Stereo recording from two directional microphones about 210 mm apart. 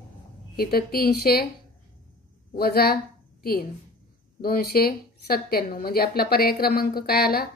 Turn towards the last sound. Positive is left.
turn(degrees=45)  # may be behind; listen again after turning